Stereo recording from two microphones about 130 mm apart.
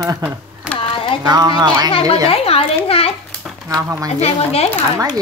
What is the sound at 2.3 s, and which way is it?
Speech, 45° left (ahead or behind).